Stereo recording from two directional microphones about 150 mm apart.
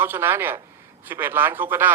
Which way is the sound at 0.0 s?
15° right (ahead or behind).